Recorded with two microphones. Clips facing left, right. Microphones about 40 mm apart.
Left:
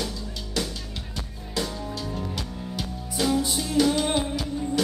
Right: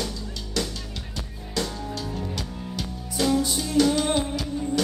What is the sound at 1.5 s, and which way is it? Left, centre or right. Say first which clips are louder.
Music: right 1 dB; centre.